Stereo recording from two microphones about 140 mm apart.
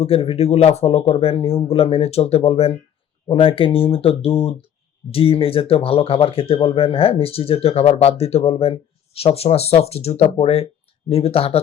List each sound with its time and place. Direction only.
0.0 s speech: 45° left (ahead or behind)